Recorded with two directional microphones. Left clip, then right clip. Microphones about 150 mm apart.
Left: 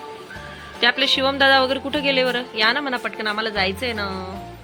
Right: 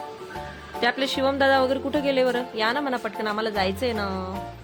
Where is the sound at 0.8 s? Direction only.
15° right (ahead or behind).